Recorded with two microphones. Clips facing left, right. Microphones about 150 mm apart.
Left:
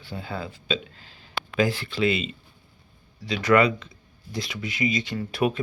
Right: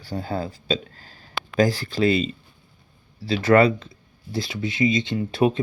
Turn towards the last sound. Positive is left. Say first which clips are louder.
# right 4 dB
turn(degrees=-25)  # may be behind; listen again after turning